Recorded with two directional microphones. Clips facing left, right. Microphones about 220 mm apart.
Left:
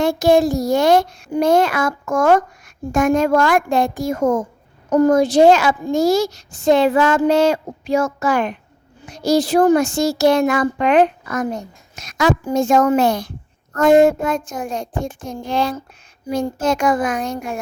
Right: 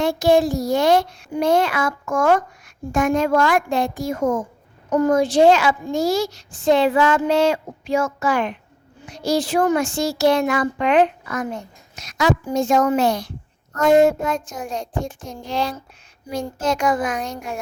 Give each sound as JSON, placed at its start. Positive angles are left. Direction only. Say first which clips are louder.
{"t": 0.0, "sound": "speech", "louder": "left 2 dB", "side_deg": 45}